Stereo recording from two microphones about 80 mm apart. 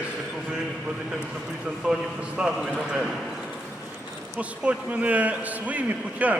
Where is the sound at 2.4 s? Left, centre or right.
Centre.